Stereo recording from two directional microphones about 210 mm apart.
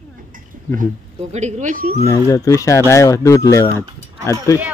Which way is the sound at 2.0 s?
15° left (ahead or behind).